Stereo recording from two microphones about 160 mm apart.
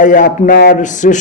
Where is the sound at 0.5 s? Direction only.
90° left.